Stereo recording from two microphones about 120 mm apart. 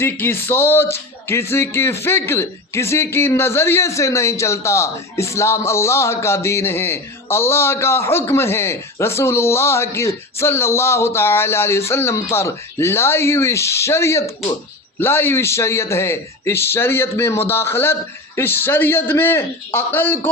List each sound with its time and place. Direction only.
0.0 s a man's voice: 20° left (ahead or behind)